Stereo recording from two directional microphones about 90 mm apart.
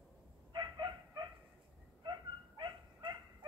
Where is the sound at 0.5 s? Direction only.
55° right (ahead or behind).